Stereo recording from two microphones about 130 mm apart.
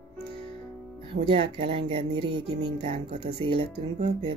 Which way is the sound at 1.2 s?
50° right (ahead or behind).